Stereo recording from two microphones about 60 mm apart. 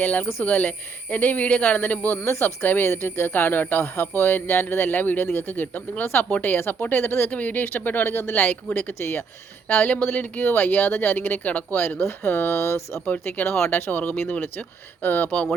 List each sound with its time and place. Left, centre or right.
0.0 s a man's voice: left
2.2 s a man's voice: left
7.3 s a man's voice: left
13.1 s a man's voice: left